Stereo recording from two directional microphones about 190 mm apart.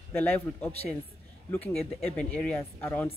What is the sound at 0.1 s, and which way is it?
A woman's voice, 10° left (ahead or behind).